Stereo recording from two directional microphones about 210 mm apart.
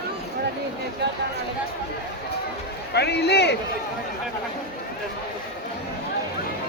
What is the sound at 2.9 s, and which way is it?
Speech, 50° left (ahead or behind).